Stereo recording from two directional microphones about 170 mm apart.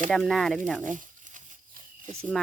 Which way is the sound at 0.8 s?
50° right (ahead or behind).